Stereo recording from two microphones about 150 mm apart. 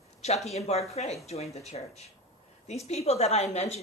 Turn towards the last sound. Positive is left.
turn(degrees=45)  # may be behind; listen again after turning